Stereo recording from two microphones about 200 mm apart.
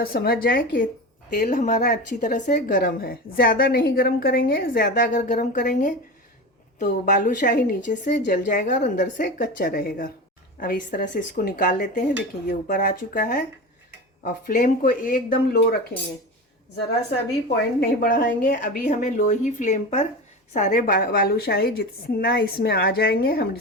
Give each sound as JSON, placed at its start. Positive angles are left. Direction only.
{"t": 0.0, "sound": "a woman's voice", "side_deg": 50}
{"t": 17.7, "sound": "a woman's voice", "side_deg": 50}